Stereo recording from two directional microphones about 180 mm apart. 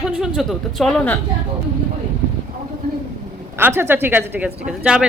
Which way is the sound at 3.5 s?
10° right (ahead or behind).